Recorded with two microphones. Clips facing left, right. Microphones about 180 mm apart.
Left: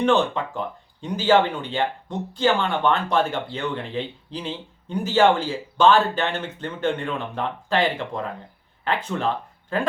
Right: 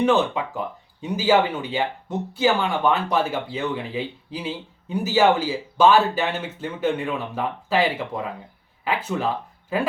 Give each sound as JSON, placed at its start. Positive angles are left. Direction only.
{"t": 0.0, "sound": "speech", "side_deg": -5}